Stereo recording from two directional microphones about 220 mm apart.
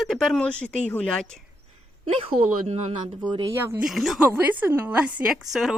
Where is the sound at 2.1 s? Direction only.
30° right (ahead or behind).